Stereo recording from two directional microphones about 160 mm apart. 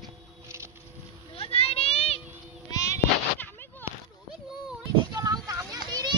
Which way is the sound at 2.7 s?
20° left (ahead or behind).